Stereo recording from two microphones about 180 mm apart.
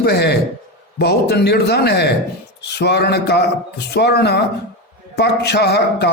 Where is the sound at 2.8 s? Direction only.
70° left (ahead or behind).